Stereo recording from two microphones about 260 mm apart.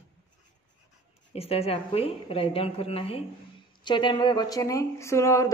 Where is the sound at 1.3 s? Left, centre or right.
Left.